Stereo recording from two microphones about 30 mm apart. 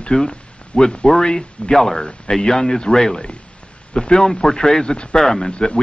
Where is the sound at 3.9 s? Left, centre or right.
Left; by 5.4 s centre.